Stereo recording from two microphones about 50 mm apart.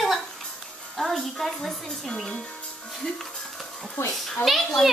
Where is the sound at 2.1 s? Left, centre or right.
Centre.